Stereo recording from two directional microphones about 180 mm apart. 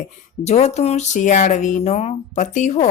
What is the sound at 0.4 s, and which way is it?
Speech, 35° left (ahead or behind).